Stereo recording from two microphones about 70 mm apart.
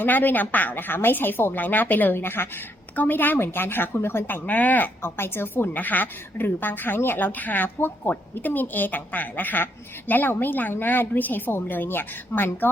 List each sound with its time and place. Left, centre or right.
0.0 s a woman's voice: left
4.4 s speech: left